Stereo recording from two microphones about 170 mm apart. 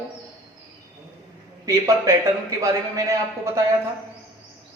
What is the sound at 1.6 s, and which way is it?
A man's voice, 20° right (ahead or behind).